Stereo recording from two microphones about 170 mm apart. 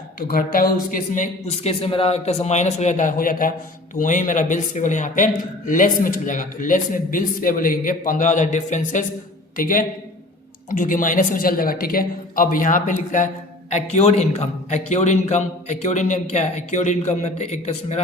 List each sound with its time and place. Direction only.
0.2 s a man's voice: 55° left (ahead or behind)